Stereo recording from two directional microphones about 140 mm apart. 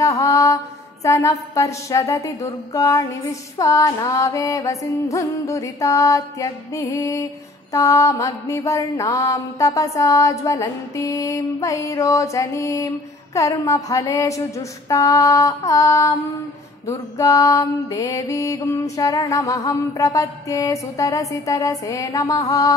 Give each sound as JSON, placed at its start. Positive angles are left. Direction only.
{"t": 0.0, "sound": "mantra", "side_deg": 25}